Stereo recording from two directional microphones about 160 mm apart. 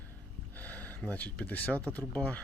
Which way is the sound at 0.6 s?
10° left (ahead or behind).